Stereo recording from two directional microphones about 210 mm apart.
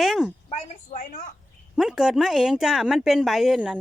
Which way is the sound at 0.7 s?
35° left (ahead or behind).